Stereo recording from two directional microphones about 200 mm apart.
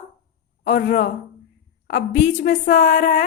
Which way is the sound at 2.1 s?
40° left (ahead or behind).